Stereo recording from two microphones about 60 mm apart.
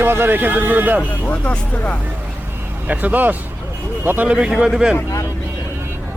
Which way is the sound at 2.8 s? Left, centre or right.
Right.